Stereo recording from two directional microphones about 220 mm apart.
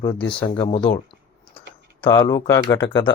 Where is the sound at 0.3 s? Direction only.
20° left (ahead or behind).